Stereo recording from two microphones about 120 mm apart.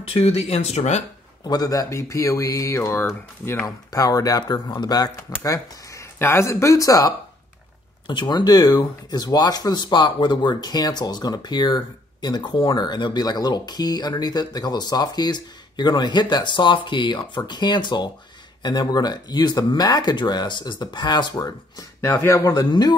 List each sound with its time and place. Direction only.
0.1 s speech: 55° left (ahead or behind)
1.4 s speech: 35° left (ahead or behind)
3.6 s speech: 30° left (ahead or behind)
22.0 s speech: 20° left (ahead or behind)